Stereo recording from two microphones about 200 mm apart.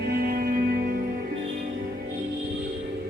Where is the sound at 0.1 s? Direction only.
50° right (ahead or behind).